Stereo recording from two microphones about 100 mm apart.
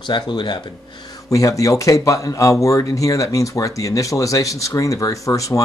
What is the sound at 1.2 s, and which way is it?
Speech, 35° left (ahead or behind).